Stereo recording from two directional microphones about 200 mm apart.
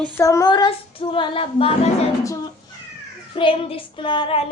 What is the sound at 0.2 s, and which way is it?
Child singing, 15° left (ahead or behind).